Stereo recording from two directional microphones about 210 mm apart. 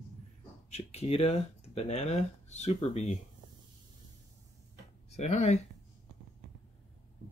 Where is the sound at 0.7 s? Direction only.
30° left (ahead or behind).